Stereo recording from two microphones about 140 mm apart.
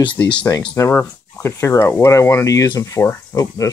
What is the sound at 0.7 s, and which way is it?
Speech, 15° left (ahead or behind).